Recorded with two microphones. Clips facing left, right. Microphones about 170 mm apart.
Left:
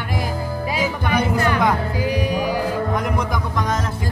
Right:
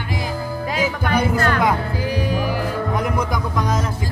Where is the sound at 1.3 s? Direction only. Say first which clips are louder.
Even; 15° left (ahead or behind).